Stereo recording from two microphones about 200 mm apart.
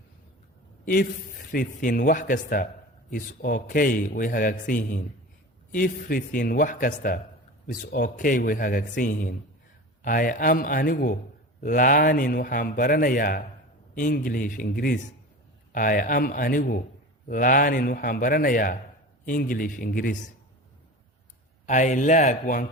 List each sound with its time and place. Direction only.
1.5 s a man's voice: 45° left (ahead or behind)
21.7 s speech: 35° left (ahead or behind)